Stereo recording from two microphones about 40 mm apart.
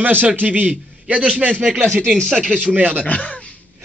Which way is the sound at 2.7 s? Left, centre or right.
Right.